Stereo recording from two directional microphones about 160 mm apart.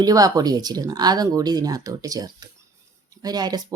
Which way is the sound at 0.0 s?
25° right (ahead or behind).